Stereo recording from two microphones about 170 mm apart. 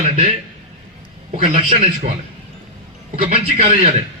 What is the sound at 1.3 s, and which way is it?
Speech, 35° right (ahead or behind).